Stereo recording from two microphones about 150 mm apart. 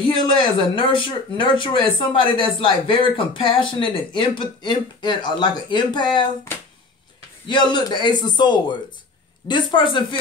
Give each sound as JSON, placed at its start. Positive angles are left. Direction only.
{"t": 0.0, "sound": "speech", "side_deg": 35}
{"t": 7.4, "sound": "a man's voice", "side_deg": 30}